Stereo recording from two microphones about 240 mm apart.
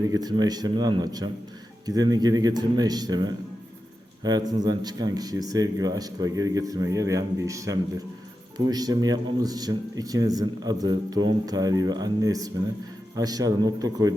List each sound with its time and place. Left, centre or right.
0.0 s speech: centre